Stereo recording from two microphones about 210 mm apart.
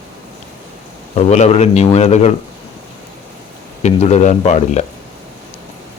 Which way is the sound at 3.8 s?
35° left (ahead or behind).